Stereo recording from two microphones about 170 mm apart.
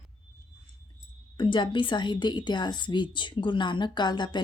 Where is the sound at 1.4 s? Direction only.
30° left (ahead or behind).